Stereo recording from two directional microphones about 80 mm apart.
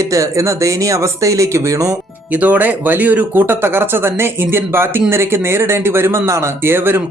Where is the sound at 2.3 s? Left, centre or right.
Right.